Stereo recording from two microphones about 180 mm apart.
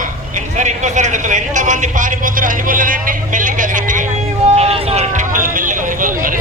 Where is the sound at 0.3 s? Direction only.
40° right (ahead or behind).